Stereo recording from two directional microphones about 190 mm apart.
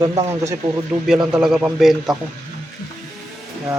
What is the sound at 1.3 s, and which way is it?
Speech, 5° right (ahead or behind).